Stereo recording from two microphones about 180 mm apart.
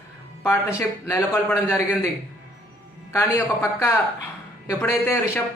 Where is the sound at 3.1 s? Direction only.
15° left (ahead or behind).